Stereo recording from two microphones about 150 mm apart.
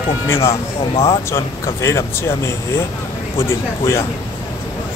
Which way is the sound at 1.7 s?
20° left (ahead or behind).